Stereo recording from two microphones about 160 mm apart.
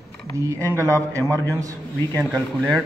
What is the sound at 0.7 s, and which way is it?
A man's voice, 20° right (ahead or behind).